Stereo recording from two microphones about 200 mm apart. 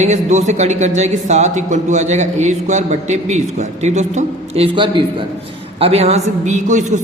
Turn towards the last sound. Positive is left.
turn(degrees=-35)  # may be behind; listen again after turning